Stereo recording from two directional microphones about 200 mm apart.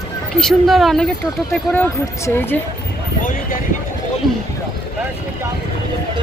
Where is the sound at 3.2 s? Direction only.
45° left (ahead or behind).